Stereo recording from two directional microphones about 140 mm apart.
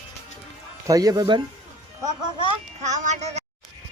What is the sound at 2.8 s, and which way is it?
Child singing, 60° right (ahead or behind).